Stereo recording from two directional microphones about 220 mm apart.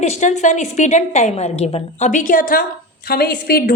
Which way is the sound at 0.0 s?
30° left (ahead or behind).